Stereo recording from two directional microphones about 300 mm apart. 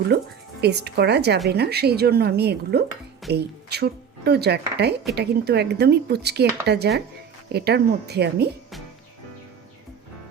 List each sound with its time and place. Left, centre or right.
0.1 s speech: right